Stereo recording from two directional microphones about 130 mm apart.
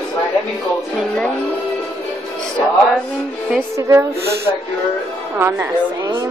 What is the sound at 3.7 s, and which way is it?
Speech, 25° right (ahead or behind).